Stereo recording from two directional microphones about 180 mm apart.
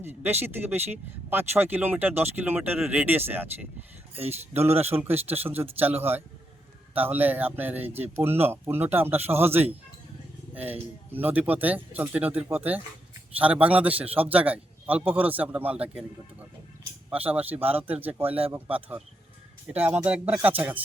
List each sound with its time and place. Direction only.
0.0 s speech: 10° right (ahead or behind)
4.1 s speech: 35° right (ahead or behind)
4.9 s speech: 10° right (ahead or behind)
17.2 s speech: 10° right (ahead or behind)